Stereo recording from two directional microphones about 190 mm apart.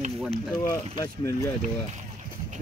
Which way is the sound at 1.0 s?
15° left (ahead or behind).